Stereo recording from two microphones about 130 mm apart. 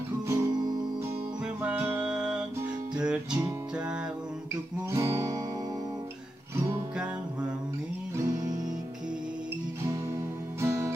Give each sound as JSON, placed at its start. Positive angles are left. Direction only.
{"t": 0.3, "sound": "guitar", "side_deg": -35}
{"t": 1.6, "sound": "music", "side_deg": -10}
{"t": 4.9, "sound": "music", "side_deg": -25}
{"t": 6.5, "sound": "music", "side_deg": -20}
{"t": 10.6, "sound": "music", "side_deg": -20}